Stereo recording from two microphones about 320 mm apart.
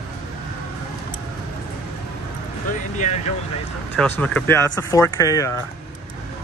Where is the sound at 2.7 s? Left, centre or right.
Left.